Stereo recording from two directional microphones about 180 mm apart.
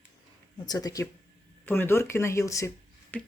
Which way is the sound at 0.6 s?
20° left (ahead or behind).